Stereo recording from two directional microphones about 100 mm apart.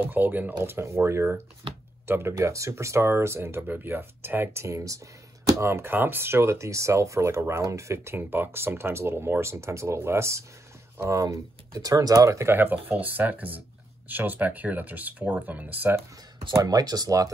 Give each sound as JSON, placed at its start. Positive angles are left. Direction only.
{"t": 0.0, "sound": "speech", "side_deg": -20}
{"t": 16.5, "sound": "speech", "side_deg": -40}